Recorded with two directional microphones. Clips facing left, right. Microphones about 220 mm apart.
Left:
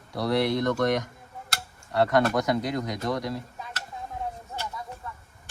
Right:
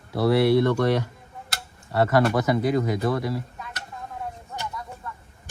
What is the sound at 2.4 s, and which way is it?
Speech, 5° right (ahead or behind).